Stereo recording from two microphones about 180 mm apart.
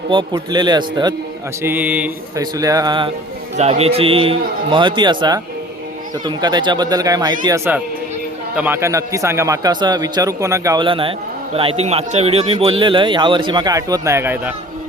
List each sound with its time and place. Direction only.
0.1 s speech: 25° right (ahead or behind)
1.6 s a man's voice: 10° right (ahead or behind)
2.4 s speech: 20° right (ahead or behind)
3.6 s a man's voice: 35° right (ahead or behind); by 10.8 s 15° right (ahead or behind)
10.8 s speech: 30° right (ahead or behind); by 14.5 s 10° right (ahead or behind)